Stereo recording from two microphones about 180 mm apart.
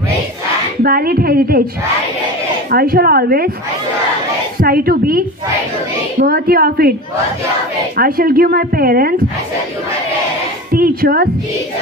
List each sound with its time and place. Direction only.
0.8 s speech: 55° right (ahead or behind)
2.7 s speech: 60° right (ahead or behind)
4.6 s speech: 55° right (ahead or behind)
8.0 s speech: 55° right (ahead or behind)
10.7 s a woman's voice: 55° right (ahead or behind)